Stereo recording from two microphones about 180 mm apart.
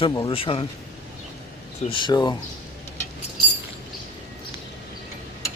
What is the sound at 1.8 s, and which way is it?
Speech, 25° left (ahead or behind).